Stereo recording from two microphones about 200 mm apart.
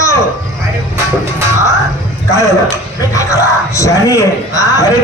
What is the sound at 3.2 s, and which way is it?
Music, 15° left (ahead or behind).